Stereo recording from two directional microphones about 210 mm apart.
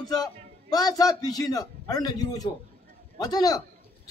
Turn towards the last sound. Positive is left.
turn(degrees=20)  # may be behind; listen again after turning